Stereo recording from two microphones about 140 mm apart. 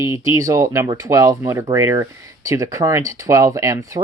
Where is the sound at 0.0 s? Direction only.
25° right (ahead or behind).